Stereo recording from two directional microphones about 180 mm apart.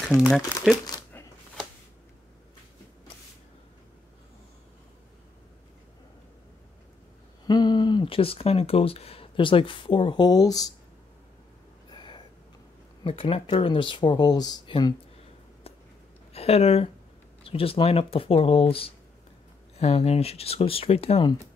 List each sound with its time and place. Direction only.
0.1 s speech: centre (ahead or behind)
0.8 s a sound: 20° left (ahead or behind)
7.4 s speech: 25° left (ahead or behind)
11.9 s a sound: 25° left (ahead or behind)
13.0 s speech: 30° left (ahead or behind)
16.3 s speech: 35° left (ahead or behind)